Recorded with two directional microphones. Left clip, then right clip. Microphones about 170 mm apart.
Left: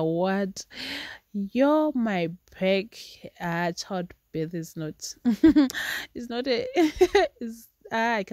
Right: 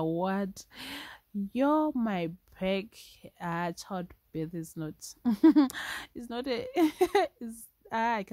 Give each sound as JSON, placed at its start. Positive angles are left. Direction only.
{"t": 0.0, "sound": "speech", "side_deg": 20}